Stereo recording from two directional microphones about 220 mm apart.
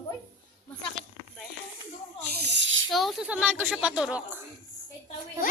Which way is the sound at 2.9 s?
Centre (ahead or behind).